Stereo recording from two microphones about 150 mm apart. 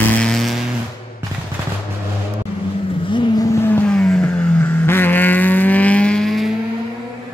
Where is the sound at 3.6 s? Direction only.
10° left (ahead or behind).